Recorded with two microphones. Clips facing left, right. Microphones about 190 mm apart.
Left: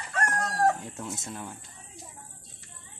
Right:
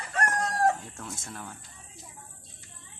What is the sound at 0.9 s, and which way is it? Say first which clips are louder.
Speech: left 3 dB; 20° left (ahead or behind).